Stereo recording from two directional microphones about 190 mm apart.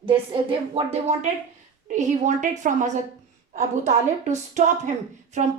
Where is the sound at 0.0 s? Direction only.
30° right (ahead or behind).